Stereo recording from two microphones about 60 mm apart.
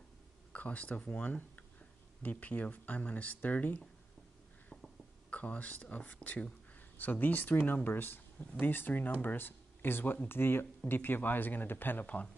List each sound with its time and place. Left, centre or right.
0.5 s speech: left
5.3 s speech: left
7.0 s speech: left